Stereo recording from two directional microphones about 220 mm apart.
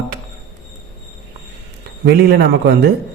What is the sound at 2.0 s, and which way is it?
Speech, 45° right (ahead or behind).